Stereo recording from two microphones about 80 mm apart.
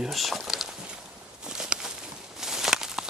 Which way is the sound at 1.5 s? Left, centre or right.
Centre.